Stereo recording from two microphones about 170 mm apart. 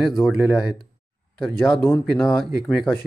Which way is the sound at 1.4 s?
5° left (ahead or behind).